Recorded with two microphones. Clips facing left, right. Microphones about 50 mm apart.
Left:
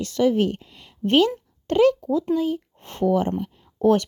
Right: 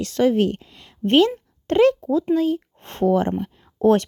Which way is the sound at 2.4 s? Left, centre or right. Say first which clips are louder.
Right 3 dB; right.